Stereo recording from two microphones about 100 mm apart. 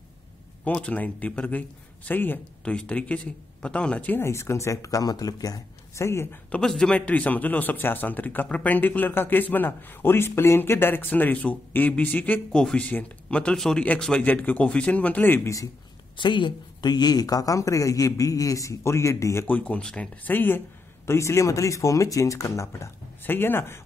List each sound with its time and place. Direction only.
0.7 s speech: 15° left (ahead or behind)
6.5 s speech: 5° left (ahead or behind)
16.2 s speech: 50° left (ahead or behind); by 19.4 s 30° left (ahead or behind)
19.4 s speech: 15° left (ahead or behind)